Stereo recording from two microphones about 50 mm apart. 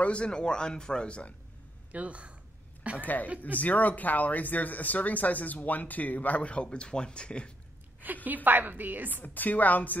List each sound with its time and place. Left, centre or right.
0.0 s speech: left
1.9 s speech: right
3.0 s speech: left
8.0 s a woman's voice: right
9.1 s speech: left